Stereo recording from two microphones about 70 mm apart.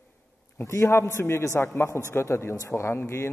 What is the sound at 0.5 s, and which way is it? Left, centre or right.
Speech, left.